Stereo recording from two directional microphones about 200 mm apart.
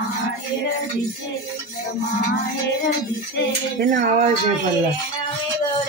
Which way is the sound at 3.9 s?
40° right (ahead or behind).